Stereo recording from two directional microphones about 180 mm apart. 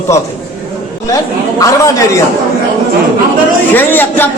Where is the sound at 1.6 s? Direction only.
20° left (ahead or behind).